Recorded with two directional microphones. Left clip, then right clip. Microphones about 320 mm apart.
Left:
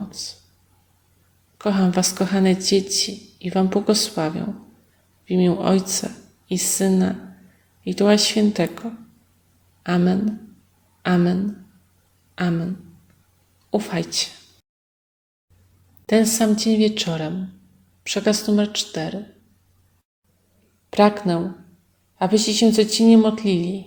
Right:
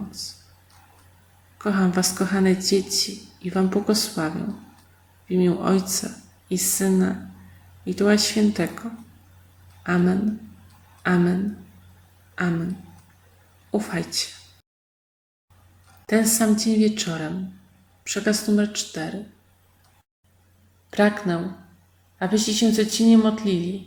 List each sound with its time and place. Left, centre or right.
0.1 s speech: centre
1.5 s a woman's voice: centre
5.3 s a woman's voice: centre
9.8 s a woman's voice: centre
13.7 s a woman's voice: centre
16.0 s a woman's voice: centre
20.9 s a woman's voice: centre